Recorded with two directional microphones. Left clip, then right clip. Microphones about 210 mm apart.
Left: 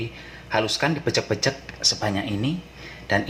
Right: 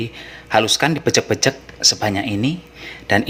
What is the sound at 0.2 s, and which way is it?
Speech, 50° right (ahead or behind).